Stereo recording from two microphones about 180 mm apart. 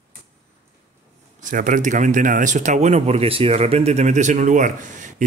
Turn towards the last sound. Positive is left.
turn(degrees=-45)  # may be behind; listen again after turning